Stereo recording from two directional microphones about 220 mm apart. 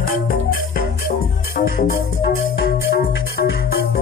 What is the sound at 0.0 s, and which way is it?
Music, 40° left (ahead or behind).